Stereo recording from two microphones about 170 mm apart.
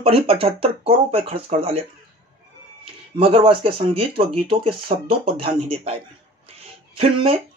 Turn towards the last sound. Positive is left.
turn(degrees=-35)  # may be behind; listen again after turning